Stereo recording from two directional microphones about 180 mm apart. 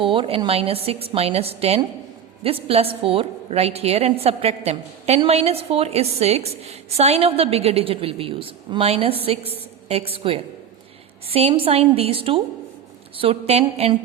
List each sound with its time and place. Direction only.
0.0 s a woman's voice: 30° right (ahead or behind)